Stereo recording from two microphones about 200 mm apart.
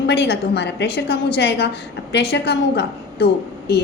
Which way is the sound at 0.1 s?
60° left (ahead or behind).